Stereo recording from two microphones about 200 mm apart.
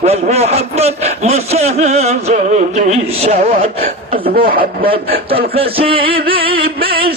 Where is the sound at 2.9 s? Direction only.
30° right (ahead or behind).